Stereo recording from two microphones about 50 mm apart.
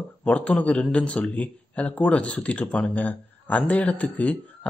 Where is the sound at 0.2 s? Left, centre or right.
Left.